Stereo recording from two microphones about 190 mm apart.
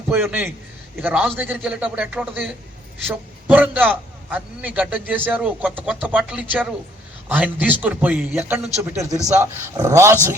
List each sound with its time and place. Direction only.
0.1 s a man's voice: 10° right (ahead or behind)